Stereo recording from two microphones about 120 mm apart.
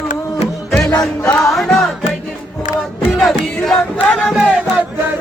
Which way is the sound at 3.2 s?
5° left (ahead or behind).